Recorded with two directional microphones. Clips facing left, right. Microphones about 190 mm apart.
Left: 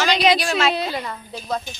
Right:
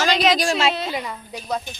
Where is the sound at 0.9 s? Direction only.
10° right (ahead or behind).